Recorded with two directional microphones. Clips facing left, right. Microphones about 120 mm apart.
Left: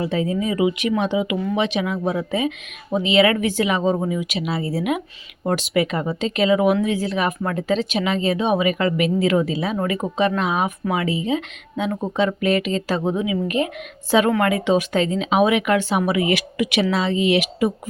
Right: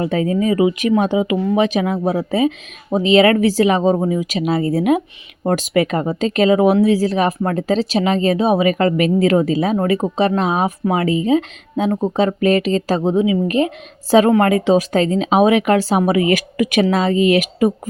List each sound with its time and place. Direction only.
0.0 s speech: 50° right (ahead or behind)